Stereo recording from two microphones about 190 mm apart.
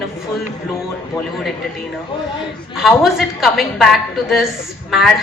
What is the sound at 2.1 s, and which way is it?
Speech, 25° left (ahead or behind).